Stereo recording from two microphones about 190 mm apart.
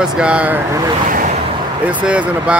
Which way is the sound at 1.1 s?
45° right (ahead or behind).